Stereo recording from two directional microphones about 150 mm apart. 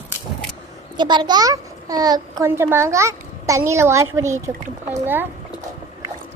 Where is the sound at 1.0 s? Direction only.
30° right (ahead or behind); by 5.2 s 15° right (ahead or behind).